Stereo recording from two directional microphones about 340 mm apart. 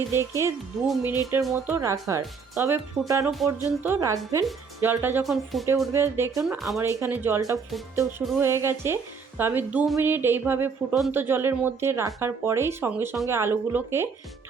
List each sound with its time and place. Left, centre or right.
0.1 s speech: centre